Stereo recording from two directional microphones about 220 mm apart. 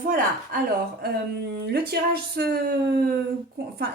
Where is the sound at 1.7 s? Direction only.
45° right (ahead or behind).